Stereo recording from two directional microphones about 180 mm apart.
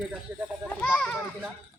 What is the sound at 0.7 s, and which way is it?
Speech, 5° left (ahead or behind).